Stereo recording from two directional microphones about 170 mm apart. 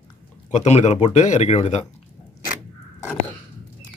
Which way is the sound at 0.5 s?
40° left (ahead or behind).